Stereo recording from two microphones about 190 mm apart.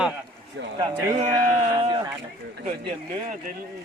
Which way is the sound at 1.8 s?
20° right (ahead or behind).